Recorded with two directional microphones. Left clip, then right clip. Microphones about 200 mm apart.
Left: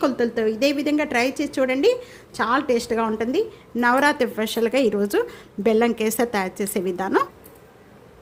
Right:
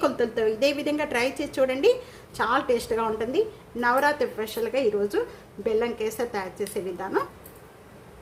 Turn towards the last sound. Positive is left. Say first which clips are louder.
# left 6 dB
turn(degrees=45)  # may be behind; listen again after turning